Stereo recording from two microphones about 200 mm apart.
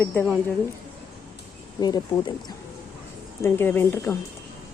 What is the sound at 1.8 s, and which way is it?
Speech, 20° left (ahead or behind).